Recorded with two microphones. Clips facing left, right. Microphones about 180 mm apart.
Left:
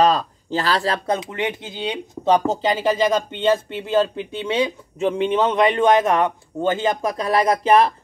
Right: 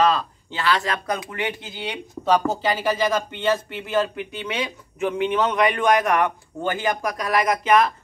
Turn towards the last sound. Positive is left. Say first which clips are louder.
# left 3 dB
turn(degrees=30)  # may be behind; listen again after turning